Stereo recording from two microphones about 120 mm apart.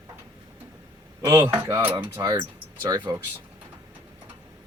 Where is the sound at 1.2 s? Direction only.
20° right (ahead or behind).